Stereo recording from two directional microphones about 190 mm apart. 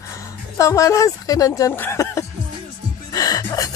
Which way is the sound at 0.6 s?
15° left (ahead or behind).